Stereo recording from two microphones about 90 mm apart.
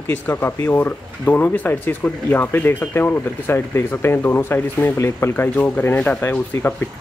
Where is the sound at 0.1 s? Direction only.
20° left (ahead or behind).